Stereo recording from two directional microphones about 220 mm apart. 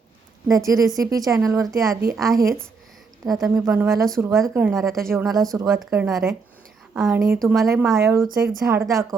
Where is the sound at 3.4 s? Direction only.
Centre (ahead or behind).